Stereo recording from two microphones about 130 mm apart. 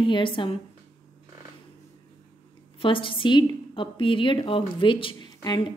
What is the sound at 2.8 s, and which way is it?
A woman's voice, 40° left (ahead or behind).